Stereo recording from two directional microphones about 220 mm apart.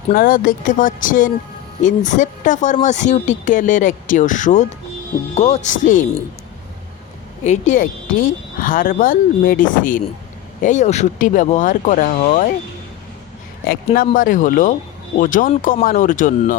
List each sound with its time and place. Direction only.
0.1 s speech: 40° left (ahead or behind)
7.4 s speech: 30° left (ahead or behind)
13.7 s speech: 40° left (ahead or behind)